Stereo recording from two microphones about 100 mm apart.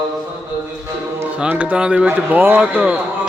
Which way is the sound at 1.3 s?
15° right (ahead or behind).